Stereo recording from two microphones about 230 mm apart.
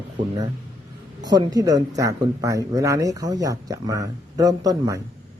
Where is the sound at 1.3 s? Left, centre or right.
Centre.